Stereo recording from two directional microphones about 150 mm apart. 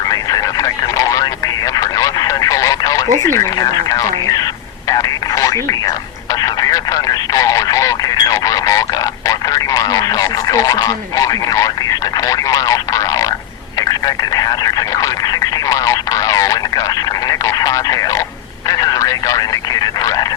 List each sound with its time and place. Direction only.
0.1 s radio: 25° left (ahead or behind)
1.8 s a sound: 20° left (ahead or behind)
3.2 s speech: 20° left (ahead or behind)
14.3 s speech: 25° left (ahead or behind)